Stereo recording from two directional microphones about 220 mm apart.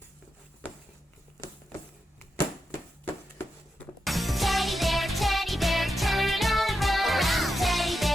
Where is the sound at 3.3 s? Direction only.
5° left (ahead or behind).